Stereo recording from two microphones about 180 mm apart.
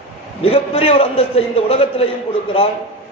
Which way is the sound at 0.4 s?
35° left (ahead or behind).